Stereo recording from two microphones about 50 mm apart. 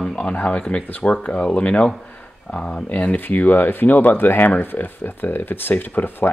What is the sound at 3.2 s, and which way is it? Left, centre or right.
Speech, left.